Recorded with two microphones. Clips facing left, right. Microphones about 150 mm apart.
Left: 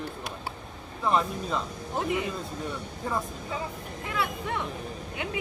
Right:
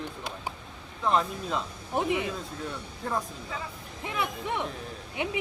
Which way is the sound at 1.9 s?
20° right (ahead or behind).